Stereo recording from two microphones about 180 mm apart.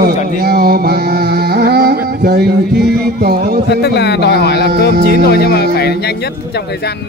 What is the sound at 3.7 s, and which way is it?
A man's voice, 65° left (ahead or behind).